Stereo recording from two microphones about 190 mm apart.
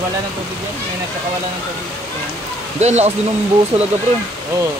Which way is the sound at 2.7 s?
35° right (ahead or behind).